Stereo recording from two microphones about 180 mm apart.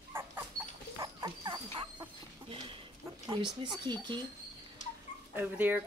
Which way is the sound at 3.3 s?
25° right (ahead or behind).